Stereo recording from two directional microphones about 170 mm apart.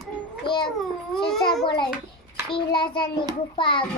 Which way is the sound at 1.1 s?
Centre (ahead or behind).